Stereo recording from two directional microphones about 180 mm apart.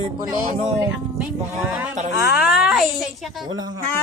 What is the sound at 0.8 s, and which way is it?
Speech, 10° right (ahead or behind).